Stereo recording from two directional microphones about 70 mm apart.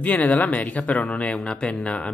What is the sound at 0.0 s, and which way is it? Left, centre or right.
Speech, left.